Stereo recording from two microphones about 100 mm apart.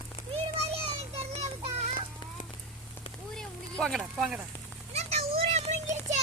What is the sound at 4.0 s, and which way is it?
Speech, 5° right (ahead or behind).